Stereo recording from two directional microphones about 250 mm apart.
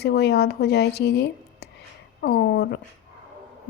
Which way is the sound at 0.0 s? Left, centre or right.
Left.